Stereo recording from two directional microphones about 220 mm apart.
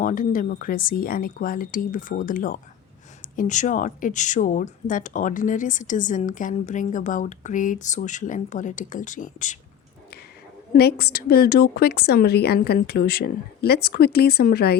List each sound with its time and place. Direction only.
0.0 s a woman's voice: 40° left (ahead or behind)
10.8 s a woman's voice: 45° left (ahead or behind)